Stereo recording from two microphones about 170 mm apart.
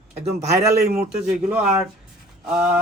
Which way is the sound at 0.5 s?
20° right (ahead or behind).